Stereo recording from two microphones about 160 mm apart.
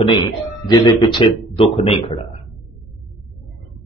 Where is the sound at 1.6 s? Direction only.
35° left (ahead or behind).